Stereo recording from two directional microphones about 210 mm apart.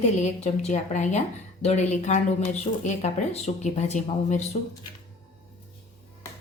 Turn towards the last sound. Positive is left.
turn(degrees=35)  # may be behind; listen again after turning